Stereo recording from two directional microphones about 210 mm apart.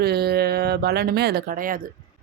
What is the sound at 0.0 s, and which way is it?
Speech, 50° right (ahead or behind).